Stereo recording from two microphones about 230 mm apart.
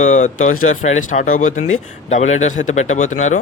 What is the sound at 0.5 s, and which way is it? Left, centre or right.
Speech, left.